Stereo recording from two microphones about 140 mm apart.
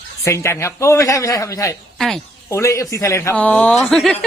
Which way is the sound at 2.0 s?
Centre (ahead or behind).